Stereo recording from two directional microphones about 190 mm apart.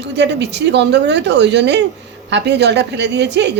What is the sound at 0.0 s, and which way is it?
A woman's voice, 65° right (ahead or behind).